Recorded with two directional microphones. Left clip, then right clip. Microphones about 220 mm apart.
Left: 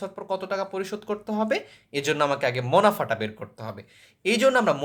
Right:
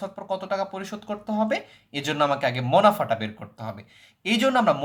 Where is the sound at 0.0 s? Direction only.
20° left (ahead or behind).